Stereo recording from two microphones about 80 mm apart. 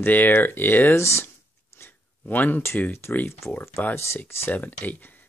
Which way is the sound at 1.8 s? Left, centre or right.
Left.